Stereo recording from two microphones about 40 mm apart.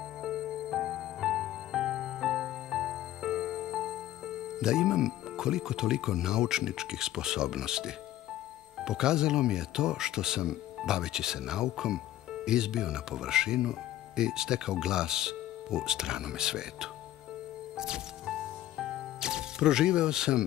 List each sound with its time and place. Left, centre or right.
0.2 s music: centre
8.7 s speech: centre
17.7 s music: centre